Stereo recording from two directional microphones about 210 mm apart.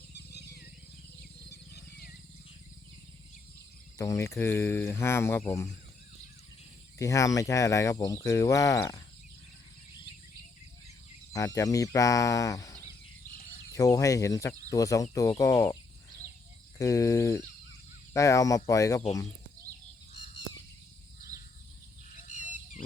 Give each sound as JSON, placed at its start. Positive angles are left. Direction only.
{"t": 0.1, "sound": "wild animals", "side_deg": 50}
{"t": 3.9, "sound": "speech", "side_deg": 15}
{"t": 7.0, "sound": "speech", "side_deg": 15}
{"t": 11.3, "sound": "speech", "side_deg": 15}
{"t": 22.3, "sound": "a sound", "side_deg": 35}